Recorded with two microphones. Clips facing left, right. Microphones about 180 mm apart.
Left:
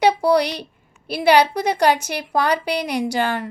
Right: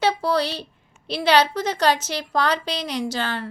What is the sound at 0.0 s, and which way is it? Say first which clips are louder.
A woman's voice: left 5 dB; 15° left (ahead or behind).